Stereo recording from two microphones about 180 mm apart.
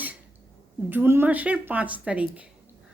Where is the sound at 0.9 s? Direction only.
10° right (ahead or behind).